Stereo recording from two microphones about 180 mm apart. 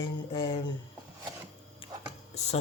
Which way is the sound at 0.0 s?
30° left (ahead or behind).